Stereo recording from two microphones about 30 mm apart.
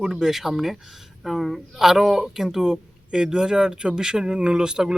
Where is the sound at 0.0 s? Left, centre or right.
Centre.